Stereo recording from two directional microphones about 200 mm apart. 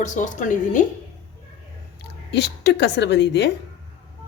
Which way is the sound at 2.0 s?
60° left (ahead or behind).